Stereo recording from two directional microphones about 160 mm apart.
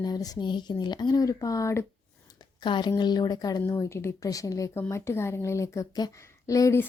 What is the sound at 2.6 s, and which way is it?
A woman's voice, 30° left (ahead or behind).